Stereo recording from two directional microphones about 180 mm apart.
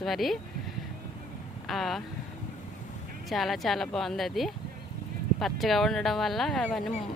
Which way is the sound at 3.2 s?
Centre (ahead or behind).